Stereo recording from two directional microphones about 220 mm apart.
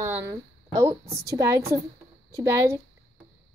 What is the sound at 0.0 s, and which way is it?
A woman's voice, 10° right (ahead or behind).